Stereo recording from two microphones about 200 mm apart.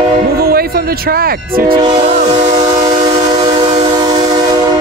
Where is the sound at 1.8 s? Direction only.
25° right (ahead or behind).